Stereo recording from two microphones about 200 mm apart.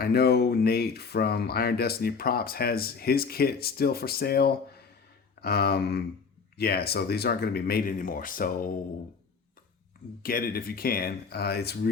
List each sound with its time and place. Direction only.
0.0 s speech: 55° left (ahead or behind)
10.2 s speech: 45° left (ahead or behind)